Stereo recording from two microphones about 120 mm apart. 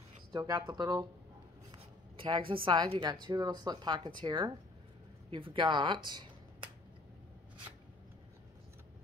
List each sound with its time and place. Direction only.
0.3 s speech: 35° right (ahead or behind)
1.7 s writing: 45° right (ahead or behind)
3.0 s speech: 35° right (ahead or behind)